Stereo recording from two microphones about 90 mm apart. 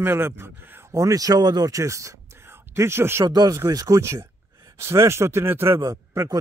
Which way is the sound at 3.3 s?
50° right (ahead or behind).